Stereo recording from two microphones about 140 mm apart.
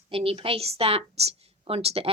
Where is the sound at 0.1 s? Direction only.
40° right (ahead or behind).